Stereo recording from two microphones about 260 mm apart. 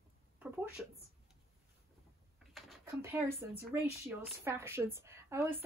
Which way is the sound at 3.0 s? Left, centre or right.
Centre.